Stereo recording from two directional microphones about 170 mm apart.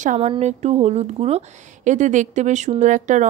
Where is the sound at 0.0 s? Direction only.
45° right (ahead or behind).